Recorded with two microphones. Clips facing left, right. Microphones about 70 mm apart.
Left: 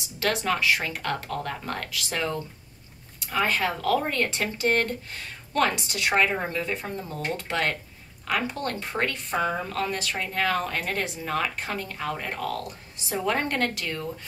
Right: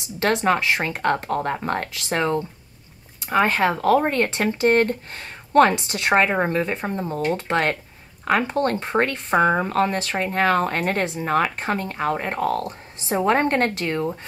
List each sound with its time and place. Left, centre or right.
0.0 s speech: right